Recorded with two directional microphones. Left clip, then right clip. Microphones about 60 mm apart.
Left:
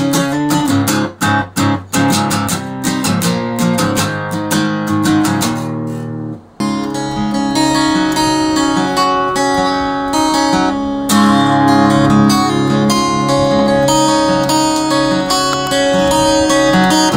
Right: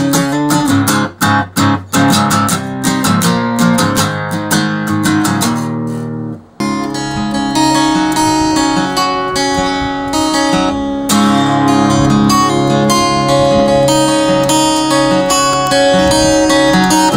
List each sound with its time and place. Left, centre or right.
0.0 s music: right
7.5 s music: right